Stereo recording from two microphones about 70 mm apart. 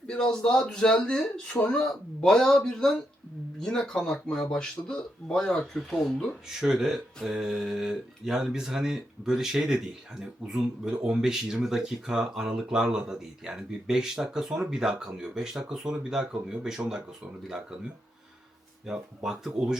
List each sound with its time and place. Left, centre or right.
0.1 s speech: centre
5.9 s speech: centre
18.9 s speech: centre